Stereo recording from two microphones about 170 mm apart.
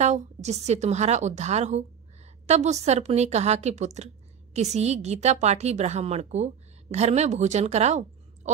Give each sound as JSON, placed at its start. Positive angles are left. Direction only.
{"t": 0.0, "sound": "a woman's voice", "side_deg": -40}